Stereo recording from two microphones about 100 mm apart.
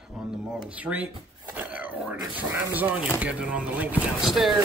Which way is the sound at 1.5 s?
15° right (ahead or behind).